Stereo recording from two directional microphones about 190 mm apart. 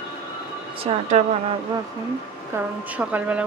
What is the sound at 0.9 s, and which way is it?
Speech, 30° right (ahead or behind).